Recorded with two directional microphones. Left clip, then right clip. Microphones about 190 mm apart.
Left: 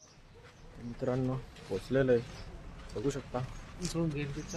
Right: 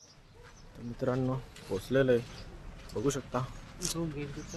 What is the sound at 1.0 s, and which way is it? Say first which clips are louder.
Speech: right 2 dB; 10° right (ahead or behind).